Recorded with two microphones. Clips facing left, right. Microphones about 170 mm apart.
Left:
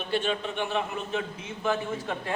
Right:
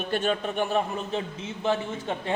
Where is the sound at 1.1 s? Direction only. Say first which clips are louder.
Right 1 dB; 30° right (ahead or behind).